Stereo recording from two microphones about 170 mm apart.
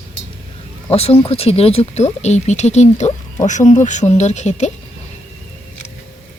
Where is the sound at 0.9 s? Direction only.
35° left (ahead or behind).